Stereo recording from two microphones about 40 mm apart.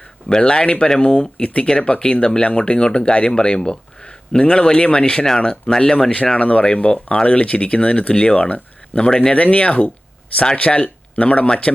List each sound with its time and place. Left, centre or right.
0.3 s speech: left
6.3 s speech: left
9.0 s speech: centre
9.3 s speech: left